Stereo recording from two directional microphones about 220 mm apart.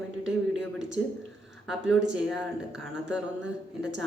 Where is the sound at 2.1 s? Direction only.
5° right (ahead or behind).